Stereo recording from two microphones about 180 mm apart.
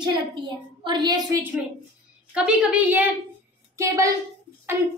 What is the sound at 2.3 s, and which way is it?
A woman's voice, 5° right (ahead or behind).